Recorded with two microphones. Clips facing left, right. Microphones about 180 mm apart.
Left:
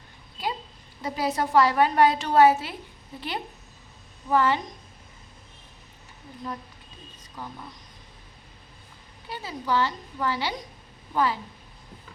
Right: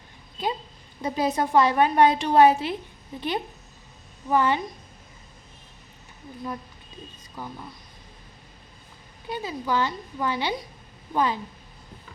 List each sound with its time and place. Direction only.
1.0 s a woman's voice: 20° right (ahead or behind)
7.4 s a woman's voice: 10° right (ahead or behind)
9.3 s a woman's voice: 15° right (ahead or behind)